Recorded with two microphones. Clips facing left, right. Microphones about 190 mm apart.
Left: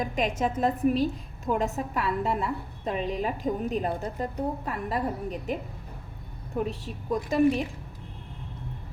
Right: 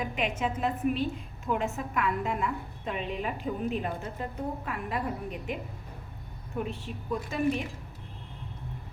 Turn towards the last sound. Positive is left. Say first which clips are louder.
# left 6 dB
turn(degrees=40)  # may be behind; listen again after turning